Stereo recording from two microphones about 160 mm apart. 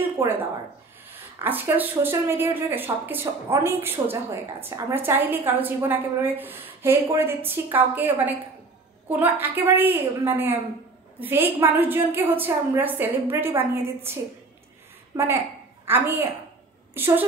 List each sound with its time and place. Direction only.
0.2 s speech: 15° right (ahead or behind)
15.1 s a woman's voice: 20° right (ahead or behind)